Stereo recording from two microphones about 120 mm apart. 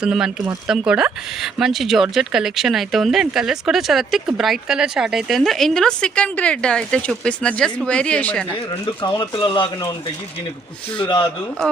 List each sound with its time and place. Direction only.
0.0 s speech: 5° right (ahead or behind); by 8.4 s 10° left (ahead or behind)
9.1 s speech: 40° left (ahead or behind)